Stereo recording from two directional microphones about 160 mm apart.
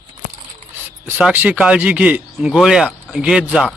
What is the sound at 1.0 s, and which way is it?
Speech, 10° right (ahead or behind).